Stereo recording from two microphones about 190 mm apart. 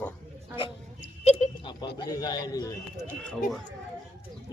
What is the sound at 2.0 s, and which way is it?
Speech, 20° left (ahead or behind).